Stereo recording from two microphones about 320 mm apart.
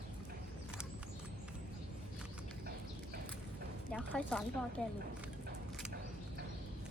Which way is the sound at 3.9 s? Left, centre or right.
Centre.